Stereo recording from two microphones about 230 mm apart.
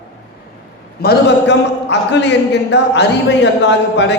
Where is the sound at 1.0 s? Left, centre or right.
Left.